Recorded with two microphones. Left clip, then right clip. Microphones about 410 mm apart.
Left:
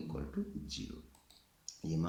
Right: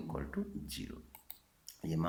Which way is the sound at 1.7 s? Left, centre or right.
Centre.